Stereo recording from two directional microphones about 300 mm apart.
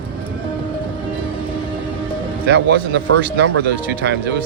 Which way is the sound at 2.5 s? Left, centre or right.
Right.